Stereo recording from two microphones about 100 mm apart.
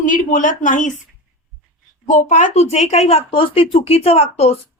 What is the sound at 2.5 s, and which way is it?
Speech, 90° left.